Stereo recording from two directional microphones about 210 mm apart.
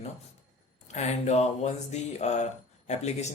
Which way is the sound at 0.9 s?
35° left (ahead or behind).